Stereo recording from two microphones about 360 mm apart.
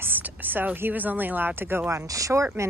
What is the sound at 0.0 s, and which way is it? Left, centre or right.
A woman's voice, centre.